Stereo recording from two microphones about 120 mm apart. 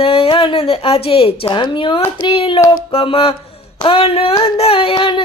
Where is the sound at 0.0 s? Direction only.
50° left (ahead or behind).